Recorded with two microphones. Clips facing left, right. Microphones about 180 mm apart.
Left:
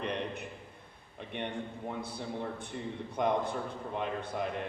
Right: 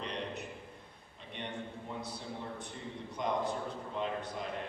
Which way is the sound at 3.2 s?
55° left (ahead or behind).